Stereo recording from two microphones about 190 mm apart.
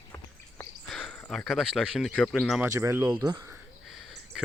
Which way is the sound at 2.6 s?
15° right (ahead or behind).